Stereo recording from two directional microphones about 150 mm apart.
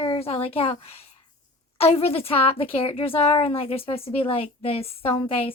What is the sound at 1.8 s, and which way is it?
Speech, 40° left (ahead or behind).